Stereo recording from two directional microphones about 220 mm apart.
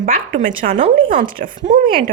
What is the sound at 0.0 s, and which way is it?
Speech, 35° right (ahead or behind).